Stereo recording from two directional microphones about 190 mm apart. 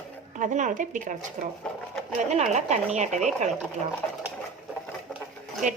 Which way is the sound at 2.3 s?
35° right (ahead or behind).